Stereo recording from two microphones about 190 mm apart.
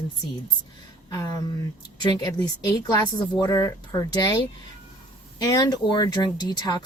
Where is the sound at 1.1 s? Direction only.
15° left (ahead or behind).